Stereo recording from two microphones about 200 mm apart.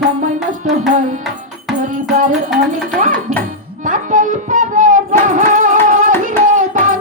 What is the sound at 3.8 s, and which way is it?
Music, 40° right (ahead or behind).